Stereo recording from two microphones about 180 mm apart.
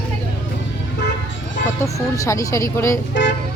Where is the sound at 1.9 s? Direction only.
20° left (ahead or behind).